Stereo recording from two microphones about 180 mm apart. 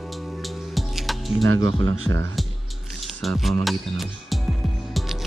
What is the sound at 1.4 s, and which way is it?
Speech, 90° right.